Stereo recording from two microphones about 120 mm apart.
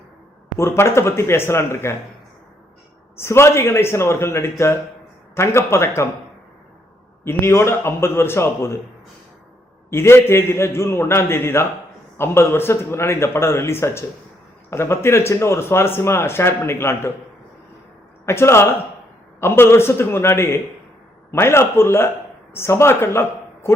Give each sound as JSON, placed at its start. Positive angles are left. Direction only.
{"t": 0.8, "sound": "a man's voice", "side_deg": 20}
{"t": 3.2, "sound": "a man's voice", "side_deg": 20}
{"t": 7.3, "sound": "a man's voice", "side_deg": 20}
{"t": 9.9, "sound": "a man's voice", "side_deg": 20}
{"t": 18.3, "sound": "a man's voice", "side_deg": 20}